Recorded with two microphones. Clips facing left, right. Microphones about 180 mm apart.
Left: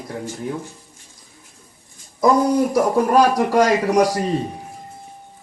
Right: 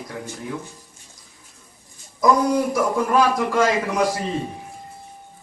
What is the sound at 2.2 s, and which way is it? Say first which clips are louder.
A man's voice: left 2 dB; 35° left (ahead or behind).